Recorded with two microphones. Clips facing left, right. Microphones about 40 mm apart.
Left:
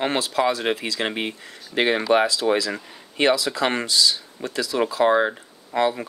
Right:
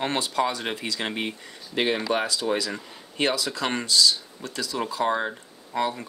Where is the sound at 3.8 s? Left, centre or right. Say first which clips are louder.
Even; centre.